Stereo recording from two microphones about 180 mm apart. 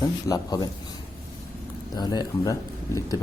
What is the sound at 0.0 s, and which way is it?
Speech, 20° left (ahead or behind).